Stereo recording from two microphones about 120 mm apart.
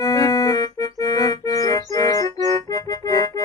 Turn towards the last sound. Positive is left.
turn(degrees=30)  # may be behind; listen again after turning